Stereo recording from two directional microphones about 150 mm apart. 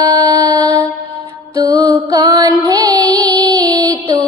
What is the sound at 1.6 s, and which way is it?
Music, 25° right (ahead or behind).